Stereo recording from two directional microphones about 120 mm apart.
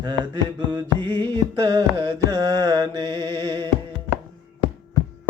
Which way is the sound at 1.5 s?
30° right (ahead or behind).